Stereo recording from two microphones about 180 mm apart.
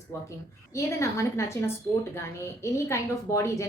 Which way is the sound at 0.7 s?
15° left (ahead or behind).